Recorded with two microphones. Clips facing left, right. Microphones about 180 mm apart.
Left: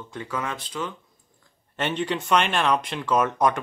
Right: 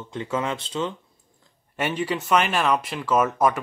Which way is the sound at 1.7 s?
10° right (ahead or behind).